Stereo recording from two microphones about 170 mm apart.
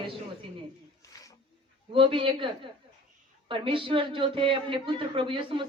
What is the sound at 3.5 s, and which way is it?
A woman's voice, 30° right (ahead or behind).